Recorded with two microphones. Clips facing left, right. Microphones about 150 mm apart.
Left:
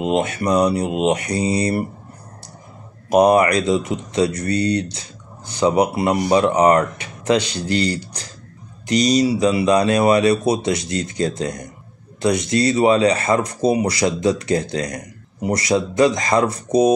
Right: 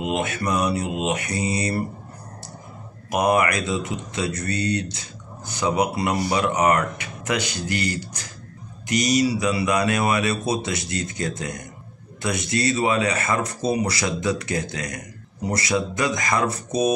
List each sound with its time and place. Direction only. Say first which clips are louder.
0.0 s speech: left 5 dB; 25° left (ahead or behind)
3.1 s speech: left 7 dB; 30° left (ahead or behind)
12.6 s speech: left 7 dB; 30° left (ahead or behind)